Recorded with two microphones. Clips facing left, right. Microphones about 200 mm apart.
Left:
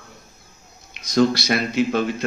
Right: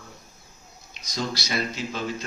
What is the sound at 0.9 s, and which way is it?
A man's voice, 65° left (ahead or behind).